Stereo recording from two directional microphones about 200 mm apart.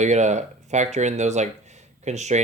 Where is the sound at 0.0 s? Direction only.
35° right (ahead or behind).